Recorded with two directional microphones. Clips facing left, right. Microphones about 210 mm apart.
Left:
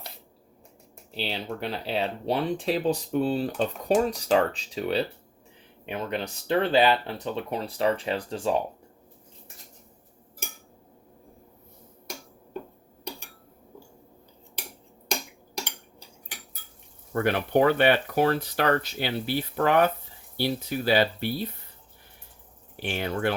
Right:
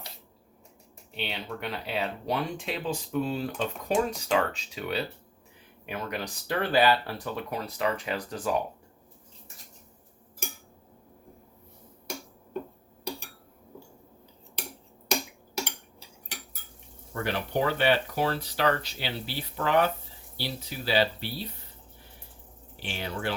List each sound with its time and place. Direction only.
1.1 s speech: 30° left (ahead or behind)
17.2 s speech: 55° left (ahead or behind)
22.8 s speech: 55° left (ahead or behind)